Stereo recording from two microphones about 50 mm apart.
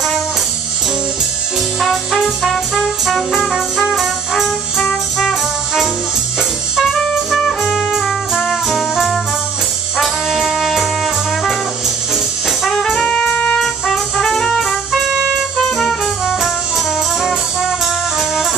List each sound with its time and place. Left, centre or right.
2.4 s music: centre
6.8 s music: centre
9.9 s brass instrument: centre
12.7 s brass instrument: centre
13.0 s music: centre
13.6 s music: centre
16.3 s brass instrument: centre